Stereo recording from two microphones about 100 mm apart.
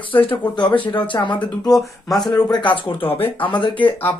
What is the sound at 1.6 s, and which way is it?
Speech, 40° left (ahead or behind).